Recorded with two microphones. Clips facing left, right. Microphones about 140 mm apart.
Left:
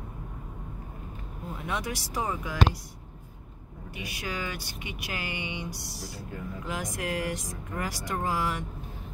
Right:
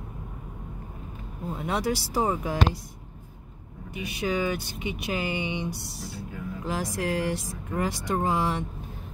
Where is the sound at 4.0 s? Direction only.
25° right (ahead or behind).